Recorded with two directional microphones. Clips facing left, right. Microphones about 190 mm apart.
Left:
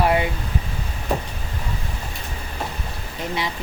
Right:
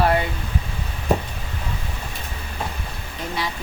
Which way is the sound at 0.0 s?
15° left (ahead or behind).